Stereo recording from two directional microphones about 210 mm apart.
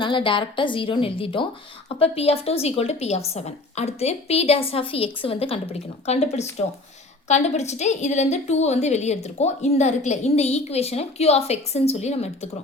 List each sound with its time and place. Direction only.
0.0 s a woman's voice: 25° left (ahead or behind)